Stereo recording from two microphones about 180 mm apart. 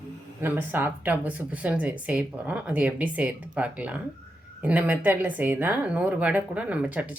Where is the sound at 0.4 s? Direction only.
10° right (ahead or behind).